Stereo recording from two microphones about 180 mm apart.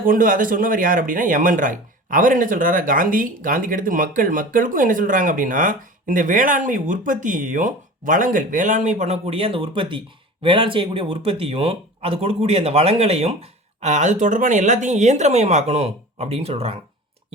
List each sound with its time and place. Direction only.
0.0 s speech: 50° right (ahead or behind); by 16.7 s 35° right (ahead or behind)